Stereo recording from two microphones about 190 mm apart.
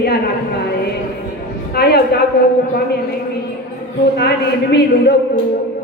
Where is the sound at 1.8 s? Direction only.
60° left (ahead or behind).